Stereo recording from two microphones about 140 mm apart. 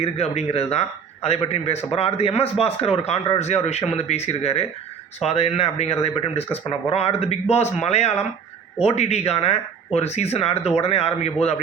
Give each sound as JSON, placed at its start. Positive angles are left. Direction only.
{"t": 0.0, "sound": "speech", "side_deg": 50}